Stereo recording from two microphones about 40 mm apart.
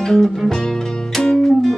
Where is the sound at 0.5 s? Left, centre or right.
Centre.